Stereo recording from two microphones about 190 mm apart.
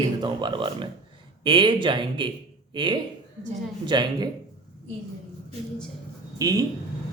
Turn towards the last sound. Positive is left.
turn(degrees=-20)  # may be behind; listen again after turning